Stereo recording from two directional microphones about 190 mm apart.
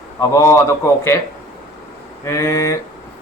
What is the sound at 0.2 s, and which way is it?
Speech, 15° left (ahead or behind).